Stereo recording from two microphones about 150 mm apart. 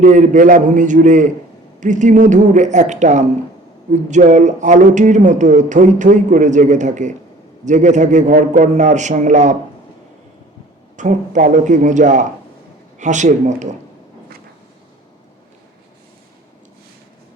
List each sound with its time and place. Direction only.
0.0 s a man's voice: 55° right (ahead or behind)
10.9 s a man's voice: 55° right (ahead or behind)